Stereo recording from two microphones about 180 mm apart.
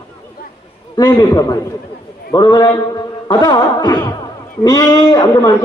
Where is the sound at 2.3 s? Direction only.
20° left (ahead or behind).